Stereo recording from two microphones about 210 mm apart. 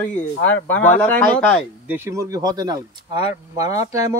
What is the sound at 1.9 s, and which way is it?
Speech, 10° right (ahead or behind).